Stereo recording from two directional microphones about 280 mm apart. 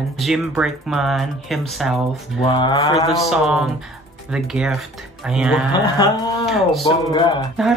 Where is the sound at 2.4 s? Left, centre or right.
Centre.